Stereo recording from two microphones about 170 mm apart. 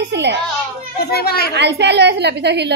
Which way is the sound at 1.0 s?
65° left (ahead or behind).